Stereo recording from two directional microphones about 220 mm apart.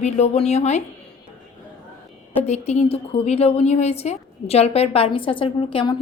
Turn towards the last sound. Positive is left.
turn(degrees=25)  # may be behind; listen again after turning